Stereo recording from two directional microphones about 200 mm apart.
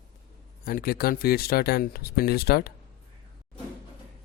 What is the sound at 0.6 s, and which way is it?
Speech, 45° left (ahead or behind).